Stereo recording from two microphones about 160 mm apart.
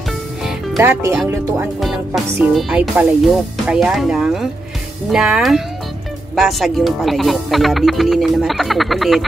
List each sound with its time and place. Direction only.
0.7 s speech: 15° right (ahead or behind)
1.8 s speech: centre (ahead or behind)